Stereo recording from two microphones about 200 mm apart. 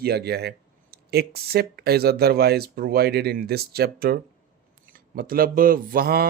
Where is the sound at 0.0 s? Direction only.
55° right (ahead or behind).